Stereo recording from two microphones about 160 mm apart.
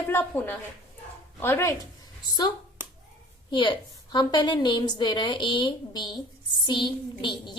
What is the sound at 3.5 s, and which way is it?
A woman's voice, 30° left (ahead or behind).